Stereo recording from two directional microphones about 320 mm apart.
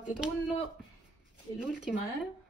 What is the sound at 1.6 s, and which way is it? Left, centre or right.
Speech, centre.